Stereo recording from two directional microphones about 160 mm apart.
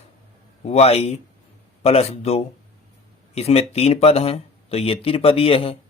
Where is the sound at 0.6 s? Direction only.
40° left (ahead or behind).